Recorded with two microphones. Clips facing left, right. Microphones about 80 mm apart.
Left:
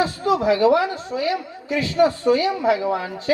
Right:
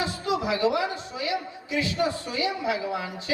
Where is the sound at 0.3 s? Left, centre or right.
Left.